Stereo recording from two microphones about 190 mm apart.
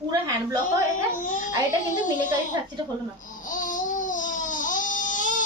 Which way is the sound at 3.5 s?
45° left (ahead or behind).